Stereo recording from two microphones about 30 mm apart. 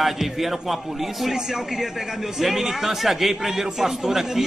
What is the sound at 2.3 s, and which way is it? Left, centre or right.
A man's voice, centre.